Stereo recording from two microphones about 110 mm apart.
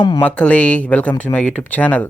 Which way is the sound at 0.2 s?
10° left (ahead or behind).